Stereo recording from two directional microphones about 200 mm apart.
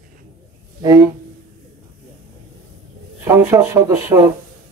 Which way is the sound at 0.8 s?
15° right (ahead or behind).